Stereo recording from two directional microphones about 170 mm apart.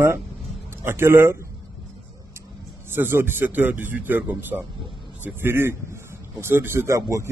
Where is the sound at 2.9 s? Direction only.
15° right (ahead or behind).